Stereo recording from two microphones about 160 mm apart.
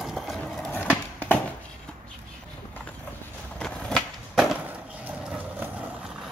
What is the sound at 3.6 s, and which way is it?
Skateboard, 5° left (ahead or behind).